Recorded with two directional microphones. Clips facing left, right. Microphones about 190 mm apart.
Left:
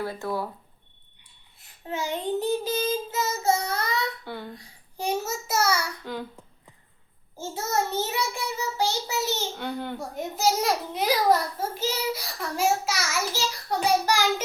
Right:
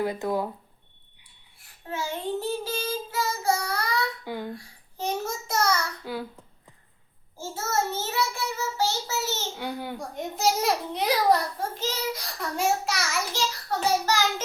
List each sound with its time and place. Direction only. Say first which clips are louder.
0.0 s a child's voice: right 3 dB; 15° right (ahead or behind)
1.5 s child singing: left 2 dB; 20° left (ahead or behind)
4.5 s a sound: right 1 dB; 10° left (ahead or behind)
7.3 s child singing: left 1 dB; 15° left (ahead or behind)
9.6 s a child's voice: left 1 dB; 10° right (ahead or behind)
10.0 s a child's voice: even; centre (ahead or behind)
13.7 s child singing: left 2 dB; 10° left (ahead or behind)